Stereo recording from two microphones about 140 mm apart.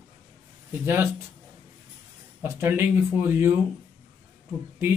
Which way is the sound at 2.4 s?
15° right (ahead or behind).